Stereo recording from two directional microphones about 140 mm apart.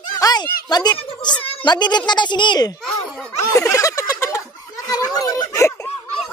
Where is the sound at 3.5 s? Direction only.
20° left (ahead or behind).